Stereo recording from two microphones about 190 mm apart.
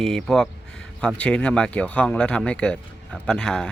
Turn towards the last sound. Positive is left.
turn(degrees=5)  # may be behind; listen again after turning